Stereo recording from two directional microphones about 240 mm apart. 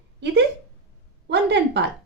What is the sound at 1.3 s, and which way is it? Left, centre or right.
Speech, right.